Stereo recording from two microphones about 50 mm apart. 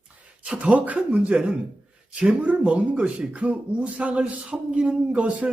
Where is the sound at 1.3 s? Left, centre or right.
Centre.